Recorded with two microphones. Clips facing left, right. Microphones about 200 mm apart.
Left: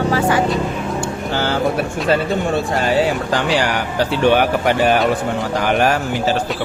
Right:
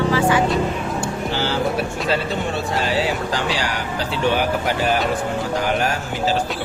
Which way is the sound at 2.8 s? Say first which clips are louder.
Left 3 dB; 55° left (ahead or behind).